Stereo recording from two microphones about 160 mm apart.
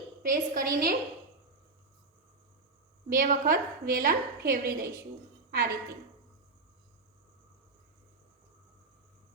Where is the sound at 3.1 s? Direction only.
60° right (ahead or behind).